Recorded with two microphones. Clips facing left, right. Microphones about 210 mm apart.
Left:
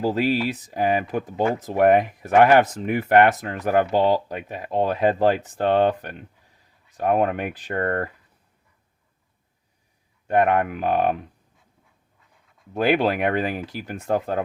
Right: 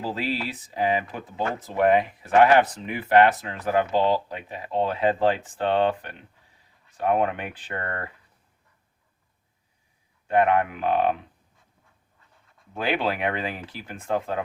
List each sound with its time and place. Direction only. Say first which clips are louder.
0.0 s speech: left 7 dB; 40° left (ahead or behind)
10.2 s speech: left 1 dB; 45° left (ahead or behind)
12.7 s speech: left 6 dB; 45° left (ahead or behind)